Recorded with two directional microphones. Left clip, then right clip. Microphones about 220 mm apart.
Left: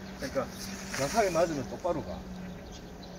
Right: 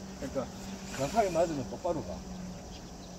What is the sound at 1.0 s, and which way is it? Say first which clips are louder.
Speech: left 1 dB; 10° left (ahead or behind).